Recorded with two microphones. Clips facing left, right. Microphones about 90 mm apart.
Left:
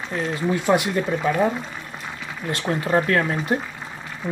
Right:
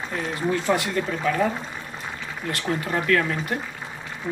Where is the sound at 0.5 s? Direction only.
20° left (ahead or behind).